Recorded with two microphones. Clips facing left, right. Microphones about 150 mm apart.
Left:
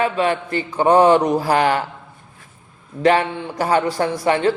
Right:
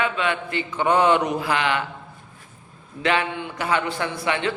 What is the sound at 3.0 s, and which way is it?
A man's voice, 40° left (ahead or behind).